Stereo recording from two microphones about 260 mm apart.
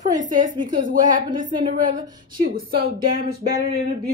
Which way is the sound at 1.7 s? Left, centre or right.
Right.